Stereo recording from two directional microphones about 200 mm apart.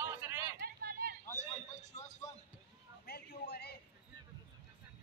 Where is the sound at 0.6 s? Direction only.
50° right (ahead or behind).